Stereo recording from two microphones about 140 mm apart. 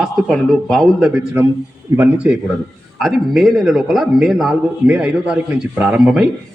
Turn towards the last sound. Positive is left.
turn(degrees=-5)  # may be behind; listen again after turning